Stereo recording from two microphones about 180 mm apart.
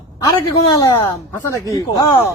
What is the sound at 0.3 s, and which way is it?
Speech, 15° left (ahead or behind).